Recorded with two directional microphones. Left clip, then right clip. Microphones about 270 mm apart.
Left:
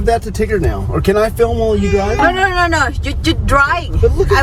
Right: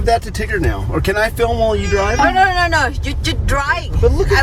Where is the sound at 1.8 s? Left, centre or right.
Centre.